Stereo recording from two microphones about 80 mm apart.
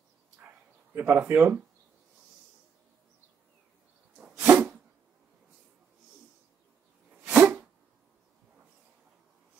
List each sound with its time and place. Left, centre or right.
0.9 s speech: right
4.4 s sneeze: right
7.2 s a sound: right